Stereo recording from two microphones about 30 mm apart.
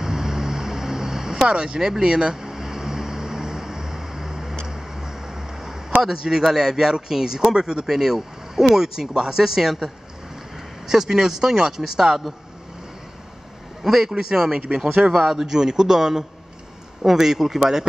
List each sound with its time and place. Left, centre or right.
0.0 s vehicle: centre
1.5 s speech: right
1.8 s speech: centre
2.0 s speech: right
2.3 s vehicle: centre
4.6 s a sound: centre
6.2 s speech: centre
10.9 s speech: centre
13.8 s speech: centre